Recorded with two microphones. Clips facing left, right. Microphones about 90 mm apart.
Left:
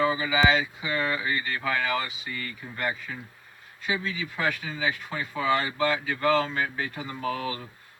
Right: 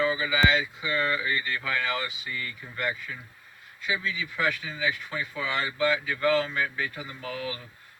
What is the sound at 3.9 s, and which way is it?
Speech, 35° left (ahead or behind).